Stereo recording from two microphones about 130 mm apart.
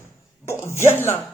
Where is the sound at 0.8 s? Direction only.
20° left (ahead or behind).